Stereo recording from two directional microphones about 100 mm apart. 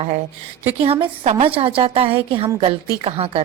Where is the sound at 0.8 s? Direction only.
75° right (ahead or behind).